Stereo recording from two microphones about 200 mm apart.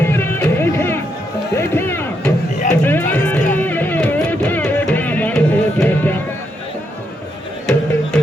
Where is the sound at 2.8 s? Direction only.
10° left (ahead or behind).